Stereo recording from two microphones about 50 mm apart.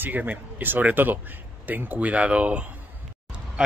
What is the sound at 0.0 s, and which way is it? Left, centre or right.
Speech, right.